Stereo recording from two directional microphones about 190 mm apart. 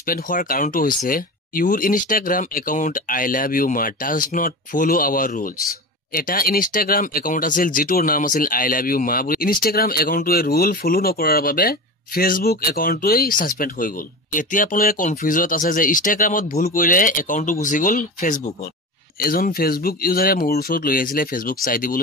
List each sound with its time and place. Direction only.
0.0 s speech: 45° left (ahead or behind)